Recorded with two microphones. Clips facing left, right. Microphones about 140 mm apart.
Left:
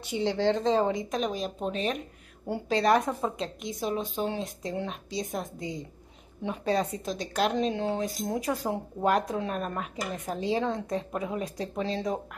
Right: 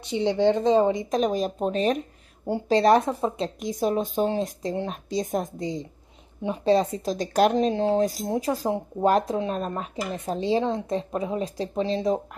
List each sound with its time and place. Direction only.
0.2 s a woman's voice: 15° right (ahead or behind)
1.1 s a woman's voice: 45° right (ahead or behind); by 12.2 s 20° right (ahead or behind)